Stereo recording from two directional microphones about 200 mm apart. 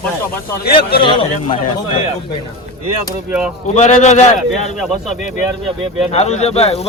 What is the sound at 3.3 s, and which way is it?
Speech, 5° right (ahead or behind).